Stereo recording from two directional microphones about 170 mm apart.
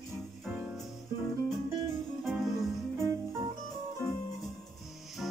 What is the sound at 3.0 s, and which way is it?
Music, 15° right (ahead or behind).